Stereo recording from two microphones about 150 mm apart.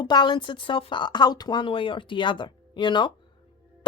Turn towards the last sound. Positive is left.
turn(degrees=30)  # may be behind; listen again after turning